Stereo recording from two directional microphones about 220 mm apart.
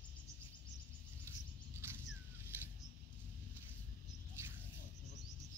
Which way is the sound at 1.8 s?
10° right (ahead or behind).